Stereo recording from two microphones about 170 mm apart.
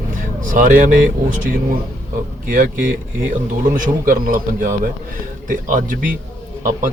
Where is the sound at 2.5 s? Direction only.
55° right (ahead or behind).